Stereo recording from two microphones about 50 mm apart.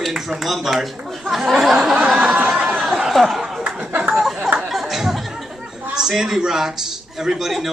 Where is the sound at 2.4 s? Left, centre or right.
Centre.